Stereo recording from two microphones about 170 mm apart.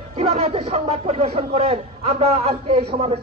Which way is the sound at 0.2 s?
35° right (ahead or behind).